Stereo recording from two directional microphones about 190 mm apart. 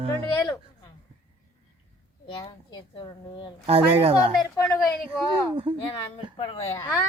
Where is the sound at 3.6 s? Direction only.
30° right (ahead or behind).